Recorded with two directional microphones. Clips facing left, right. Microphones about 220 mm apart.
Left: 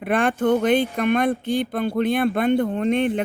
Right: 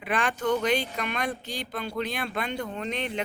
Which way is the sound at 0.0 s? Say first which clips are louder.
Left 8 dB; 50° left (ahead or behind).